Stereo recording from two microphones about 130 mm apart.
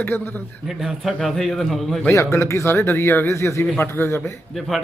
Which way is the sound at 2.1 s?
20° left (ahead or behind).